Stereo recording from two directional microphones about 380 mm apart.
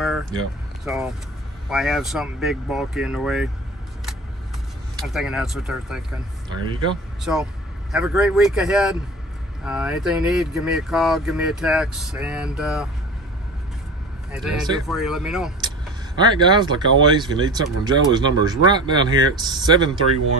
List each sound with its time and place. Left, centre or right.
0.0 s a sound: centre
0.8 s speech: centre
4.9 s speech: centre
7.3 s speech: centre
14.3 s speech: centre